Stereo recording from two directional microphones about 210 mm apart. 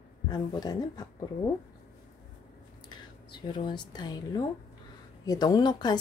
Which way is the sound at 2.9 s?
20° left (ahead or behind).